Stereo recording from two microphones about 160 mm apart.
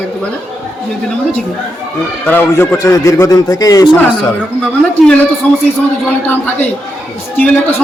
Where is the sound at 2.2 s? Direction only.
10° left (ahead or behind).